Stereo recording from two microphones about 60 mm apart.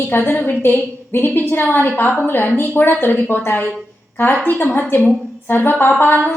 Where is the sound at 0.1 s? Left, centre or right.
Left.